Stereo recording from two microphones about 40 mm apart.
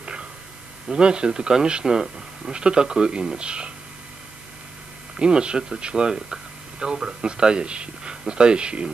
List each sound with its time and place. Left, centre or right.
0.0 s a sound: right
0.8 s speech: right
5.2 s speech: right